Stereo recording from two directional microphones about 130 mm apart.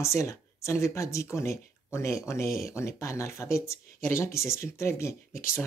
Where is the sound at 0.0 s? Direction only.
20° left (ahead or behind).